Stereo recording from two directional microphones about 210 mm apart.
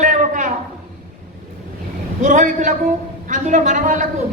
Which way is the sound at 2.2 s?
35° right (ahead or behind).